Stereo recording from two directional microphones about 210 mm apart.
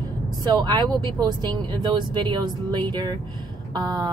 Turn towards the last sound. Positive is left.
turn(degrees=-20)  # may be behind; listen again after turning